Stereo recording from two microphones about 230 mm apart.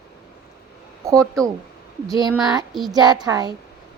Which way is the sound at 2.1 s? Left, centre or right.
Centre.